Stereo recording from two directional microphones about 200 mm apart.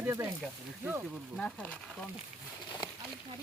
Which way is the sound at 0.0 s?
10° right (ahead or behind).